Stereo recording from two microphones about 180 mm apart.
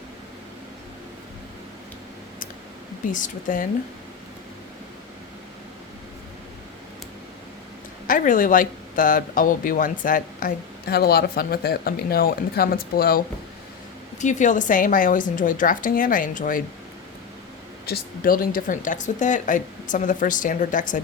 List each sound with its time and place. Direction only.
3.1 s speech: 45° left (ahead or behind)
8.0 s speech: 45° left (ahead or behind)
14.2 s speech: 40° left (ahead or behind)
17.8 s speech: 55° left (ahead or behind)